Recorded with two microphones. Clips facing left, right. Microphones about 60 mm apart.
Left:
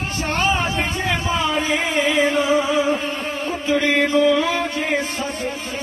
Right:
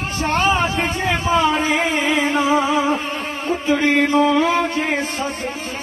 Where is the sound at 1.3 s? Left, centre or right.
Right.